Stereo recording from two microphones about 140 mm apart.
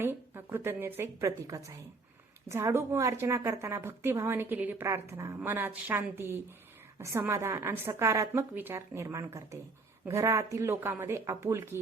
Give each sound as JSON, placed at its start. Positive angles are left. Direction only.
{"t": 0.0, "sound": "a woman's voice", "side_deg": -15}